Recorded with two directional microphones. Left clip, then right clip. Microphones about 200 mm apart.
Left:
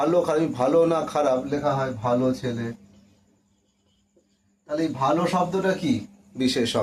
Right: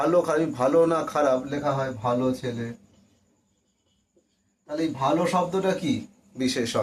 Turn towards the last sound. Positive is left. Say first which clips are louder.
# left 3 dB
turn(degrees=20)  # may be behind; listen again after turning